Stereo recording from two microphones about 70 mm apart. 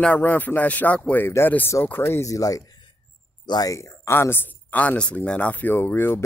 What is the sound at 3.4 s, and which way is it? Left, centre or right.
Speech, left.